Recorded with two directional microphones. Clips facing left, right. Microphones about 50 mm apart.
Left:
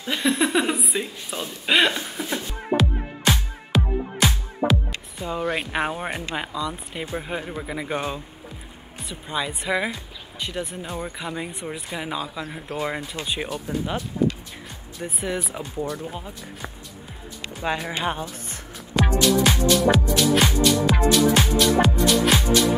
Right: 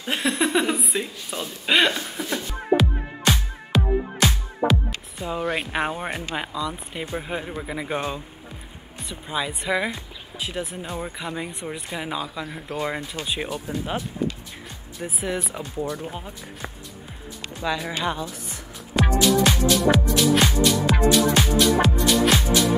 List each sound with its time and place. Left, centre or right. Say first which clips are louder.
0.2 s a sound: left 1 dB; centre
2.3 s music: right 2 dB; centre
5.2 s speech: even; centre
16.1 s speech: even; centre
17.6 s speech: even; left
19.2 s music: even; centre
21.1 s speech: left 1 dB; centre